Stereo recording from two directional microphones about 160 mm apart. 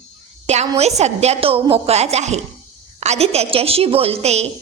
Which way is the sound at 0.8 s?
45° right (ahead or behind).